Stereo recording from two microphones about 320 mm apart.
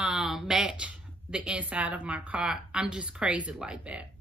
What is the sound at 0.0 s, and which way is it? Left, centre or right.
Speech, centre.